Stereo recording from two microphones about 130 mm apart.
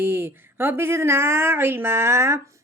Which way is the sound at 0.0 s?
20° right (ahead or behind).